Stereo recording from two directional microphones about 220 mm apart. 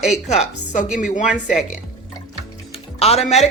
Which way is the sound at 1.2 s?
5° right (ahead or behind).